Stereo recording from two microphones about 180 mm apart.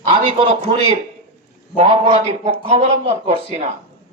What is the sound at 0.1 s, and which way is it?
A man's voice, 30° right (ahead or behind).